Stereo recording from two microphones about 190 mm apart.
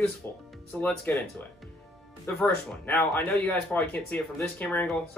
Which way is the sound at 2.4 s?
10° left (ahead or behind).